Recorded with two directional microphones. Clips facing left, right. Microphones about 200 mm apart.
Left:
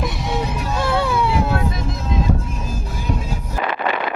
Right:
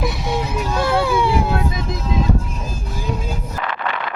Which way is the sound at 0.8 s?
Centre (ahead or behind).